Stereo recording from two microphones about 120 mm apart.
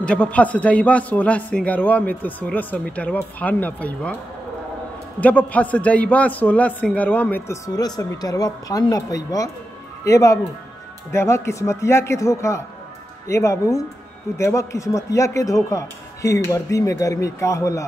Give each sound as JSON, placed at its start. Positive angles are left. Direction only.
{"t": 0.0, "sound": "a man's voice", "side_deg": 10}
{"t": 5.2, "sound": "a man's voice", "side_deg": 10}
{"t": 7.6, "sound": "speech", "side_deg": 30}